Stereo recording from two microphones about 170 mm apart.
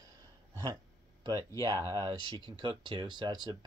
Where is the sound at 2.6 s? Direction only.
25° right (ahead or behind).